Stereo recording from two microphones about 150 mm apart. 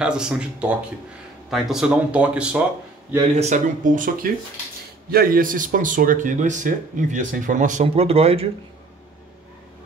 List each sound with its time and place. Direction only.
0.0 s speech: 5° right (ahead or behind)
3.3 s speech: 55° right (ahead or behind)
5.1 s speech: 75° right (ahead or behind); by 8.5 s 40° right (ahead or behind)